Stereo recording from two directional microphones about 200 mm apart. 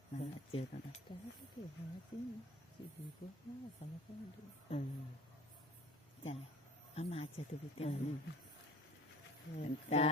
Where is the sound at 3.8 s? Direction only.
30° left (ahead or behind).